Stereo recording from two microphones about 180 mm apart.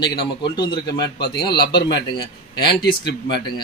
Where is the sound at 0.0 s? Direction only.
25° left (ahead or behind).